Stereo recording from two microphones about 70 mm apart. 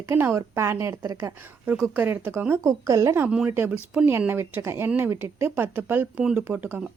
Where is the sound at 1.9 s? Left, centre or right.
Right.